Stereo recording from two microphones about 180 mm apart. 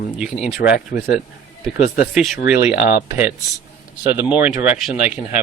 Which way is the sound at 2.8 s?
10° right (ahead or behind).